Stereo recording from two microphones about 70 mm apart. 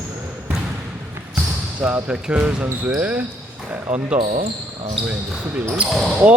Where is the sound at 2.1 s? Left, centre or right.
Centre.